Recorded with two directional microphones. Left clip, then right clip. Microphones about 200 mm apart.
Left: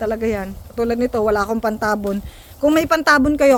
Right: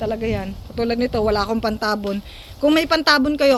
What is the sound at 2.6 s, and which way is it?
Speech, 15° left (ahead or behind).